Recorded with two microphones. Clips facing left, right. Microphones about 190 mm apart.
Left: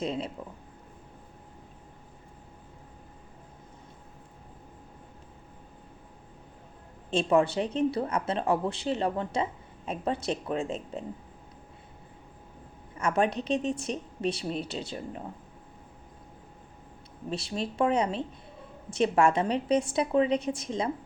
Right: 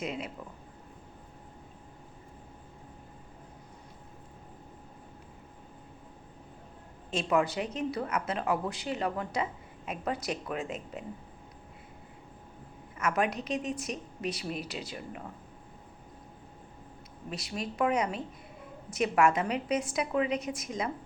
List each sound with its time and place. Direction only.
0.0 s a woman's voice: 30° left (ahead or behind)
7.1 s a woman's voice: 30° left (ahead or behind)
13.0 s a woman's voice: 30° left (ahead or behind)
17.2 s a woman's voice: 30° left (ahead or behind)